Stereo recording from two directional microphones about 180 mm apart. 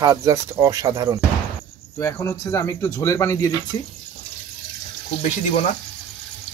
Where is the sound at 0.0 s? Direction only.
20° right (ahead or behind).